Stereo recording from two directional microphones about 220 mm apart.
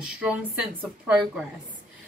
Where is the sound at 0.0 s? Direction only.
5° right (ahead or behind).